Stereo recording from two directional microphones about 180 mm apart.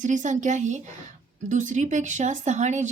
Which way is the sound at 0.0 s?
45° right (ahead or behind).